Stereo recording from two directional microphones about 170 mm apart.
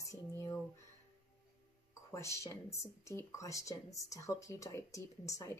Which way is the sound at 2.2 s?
15° left (ahead or behind).